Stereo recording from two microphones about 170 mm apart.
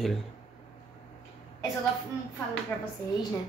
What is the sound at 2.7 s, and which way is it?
Speech, 5° left (ahead or behind).